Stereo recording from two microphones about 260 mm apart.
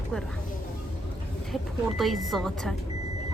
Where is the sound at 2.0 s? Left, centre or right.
Centre.